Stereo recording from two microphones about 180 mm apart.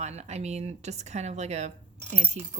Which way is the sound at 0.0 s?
40° right (ahead or behind).